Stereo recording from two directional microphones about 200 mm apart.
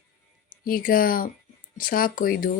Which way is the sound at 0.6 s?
45° left (ahead or behind).